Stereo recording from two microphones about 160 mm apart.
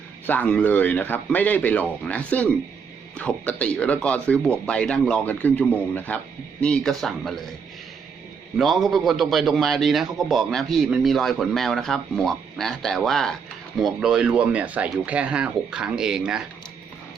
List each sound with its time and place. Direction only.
0.3 s a man's voice: 10° left (ahead or behind)
8.5 s a man's voice: centre (ahead or behind)